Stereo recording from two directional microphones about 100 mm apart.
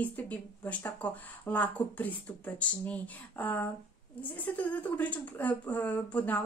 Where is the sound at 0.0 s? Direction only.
15° left (ahead or behind).